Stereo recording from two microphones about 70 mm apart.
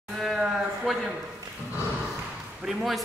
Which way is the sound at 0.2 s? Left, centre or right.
Centre.